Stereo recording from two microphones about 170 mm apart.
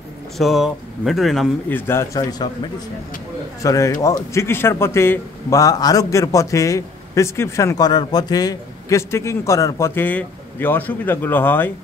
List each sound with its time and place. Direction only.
0.4 s speech: centre (ahead or behind)
1.7 s a man's voice: 10° left (ahead or behind)
3.6 s a man's voice: 20° left (ahead or behind)